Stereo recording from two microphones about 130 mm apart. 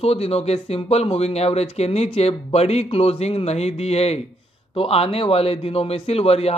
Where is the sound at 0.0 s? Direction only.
50° left (ahead or behind).